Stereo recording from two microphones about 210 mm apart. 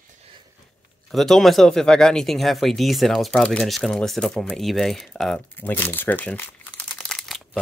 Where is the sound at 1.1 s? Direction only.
Centre (ahead or behind).